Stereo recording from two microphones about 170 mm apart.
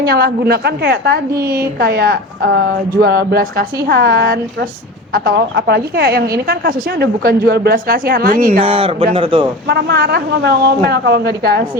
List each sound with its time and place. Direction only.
0.0 s a woman's voice: 70° right (ahead or behind)
8.5 s speech: 35° right (ahead or behind)
9.6 s a woman's voice: 75° right (ahead or behind)